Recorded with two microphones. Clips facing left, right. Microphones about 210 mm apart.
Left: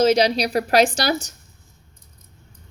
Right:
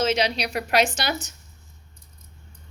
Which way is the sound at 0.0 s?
40° left (ahead or behind).